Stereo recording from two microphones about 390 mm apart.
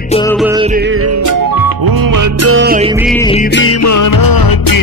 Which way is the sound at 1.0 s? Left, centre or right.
Right.